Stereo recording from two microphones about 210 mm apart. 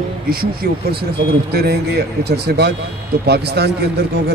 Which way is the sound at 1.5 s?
50° right (ahead or behind).